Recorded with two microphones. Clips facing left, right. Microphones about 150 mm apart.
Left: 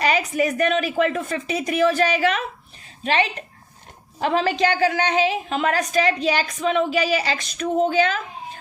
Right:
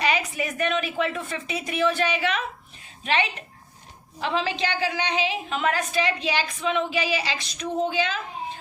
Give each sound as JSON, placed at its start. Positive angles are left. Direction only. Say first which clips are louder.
{"t": 0.0, "sound": "a woman's voice", "louder": "left 5 dB", "side_deg": 40}